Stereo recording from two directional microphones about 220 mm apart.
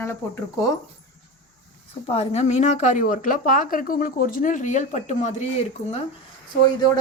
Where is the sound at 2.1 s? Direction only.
30° left (ahead or behind).